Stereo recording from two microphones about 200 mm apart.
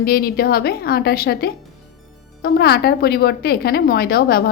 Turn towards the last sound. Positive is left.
turn(degrees=50)  # may be behind; listen again after turning